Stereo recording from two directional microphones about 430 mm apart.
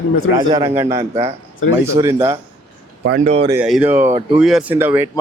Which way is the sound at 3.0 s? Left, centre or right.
Right.